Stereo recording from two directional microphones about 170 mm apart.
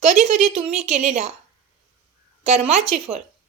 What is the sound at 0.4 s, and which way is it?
Speech, 35° right (ahead or behind).